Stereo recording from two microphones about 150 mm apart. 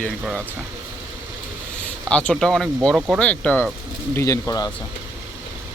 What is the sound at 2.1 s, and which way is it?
Speech, 5° left (ahead or behind).